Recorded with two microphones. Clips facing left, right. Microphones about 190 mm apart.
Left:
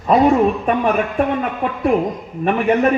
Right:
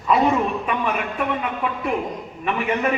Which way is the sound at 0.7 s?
50° left (ahead or behind).